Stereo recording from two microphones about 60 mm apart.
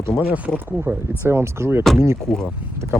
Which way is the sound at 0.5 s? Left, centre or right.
Right.